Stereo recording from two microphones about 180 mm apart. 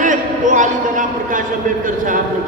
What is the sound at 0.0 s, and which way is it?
A man's voice, 45° right (ahead or behind).